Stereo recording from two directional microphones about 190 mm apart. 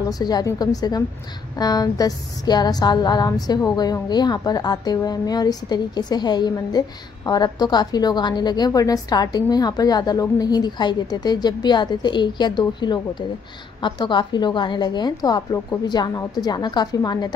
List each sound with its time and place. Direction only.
0.2 s a woman's voice: 20° left (ahead or behind)